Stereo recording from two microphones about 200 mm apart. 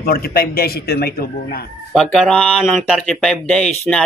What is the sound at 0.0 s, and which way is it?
A man's voice, 50° left (ahead or behind).